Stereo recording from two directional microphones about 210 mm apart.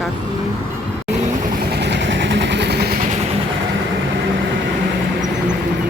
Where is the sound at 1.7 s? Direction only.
55° right (ahead or behind).